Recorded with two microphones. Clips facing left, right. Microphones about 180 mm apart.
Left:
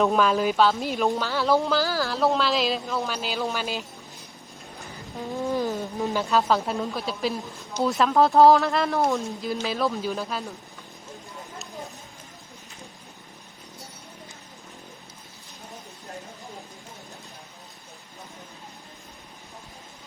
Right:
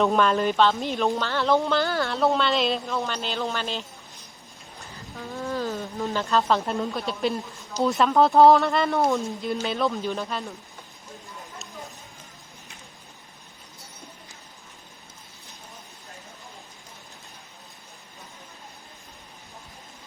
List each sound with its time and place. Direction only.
0.0 s speech: centre (ahead or behind)
4.8 s a sound: 20° left (ahead or behind)
6.2 s speech: centre (ahead or behind)